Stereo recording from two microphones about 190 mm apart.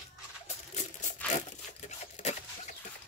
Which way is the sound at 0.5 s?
35° left (ahead or behind).